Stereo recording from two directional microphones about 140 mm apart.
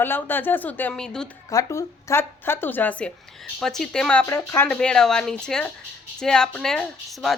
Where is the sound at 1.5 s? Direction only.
25° left (ahead or behind); by 4.2 s 5° left (ahead or behind).